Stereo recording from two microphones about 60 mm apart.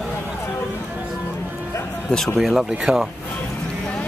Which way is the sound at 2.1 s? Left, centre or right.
Centre.